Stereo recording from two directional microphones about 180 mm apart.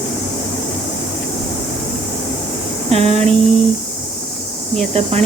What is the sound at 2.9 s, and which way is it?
Speech, 35° right (ahead or behind).